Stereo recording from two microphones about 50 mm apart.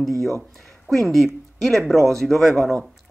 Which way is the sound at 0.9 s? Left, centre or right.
Centre.